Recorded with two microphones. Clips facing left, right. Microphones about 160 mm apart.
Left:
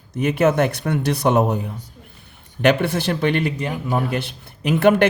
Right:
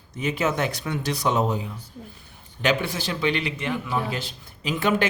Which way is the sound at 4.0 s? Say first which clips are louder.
Left 5 dB; 60° left (ahead or behind).